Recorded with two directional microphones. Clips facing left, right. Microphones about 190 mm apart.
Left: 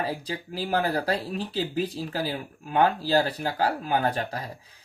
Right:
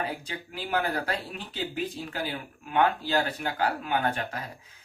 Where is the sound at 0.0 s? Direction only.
35° left (ahead or behind).